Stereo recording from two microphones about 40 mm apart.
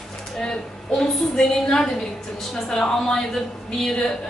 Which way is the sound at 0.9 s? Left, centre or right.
Centre.